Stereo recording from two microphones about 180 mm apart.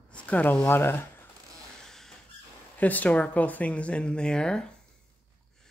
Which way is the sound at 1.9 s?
Centre (ahead or behind).